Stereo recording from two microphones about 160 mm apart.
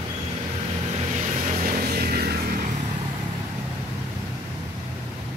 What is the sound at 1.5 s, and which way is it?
Music, 60° right (ahead or behind).